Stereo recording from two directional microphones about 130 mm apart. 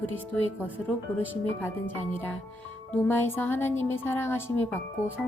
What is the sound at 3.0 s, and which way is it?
A woman's voice, 15° left (ahead or behind).